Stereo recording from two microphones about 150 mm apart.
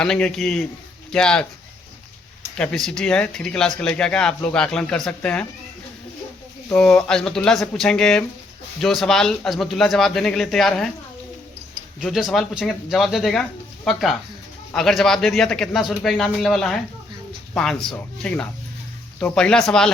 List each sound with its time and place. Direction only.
0.0 s speech: 5° left (ahead or behind)
2.6 s speech: centre (ahead or behind)
6.7 s speech: 5° left (ahead or behind)
12.0 s speech: centre (ahead or behind)